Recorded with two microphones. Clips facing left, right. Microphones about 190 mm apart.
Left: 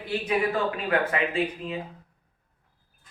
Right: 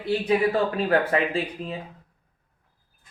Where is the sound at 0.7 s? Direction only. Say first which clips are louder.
Right 4 dB; 35° right (ahead or behind).